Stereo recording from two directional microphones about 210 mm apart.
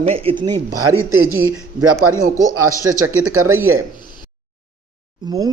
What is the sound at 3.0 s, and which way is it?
Speech, 80° right.